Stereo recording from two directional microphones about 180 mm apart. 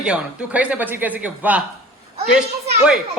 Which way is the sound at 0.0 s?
5° right (ahead or behind).